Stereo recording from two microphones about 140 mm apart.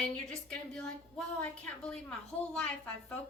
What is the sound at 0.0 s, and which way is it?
A woman's voice, 5° left (ahead or behind).